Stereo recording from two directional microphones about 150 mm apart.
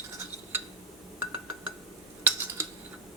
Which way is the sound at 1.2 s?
10° right (ahead or behind).